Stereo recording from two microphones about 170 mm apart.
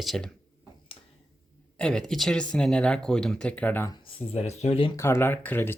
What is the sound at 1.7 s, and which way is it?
Speech, 5° left (ahead or behind).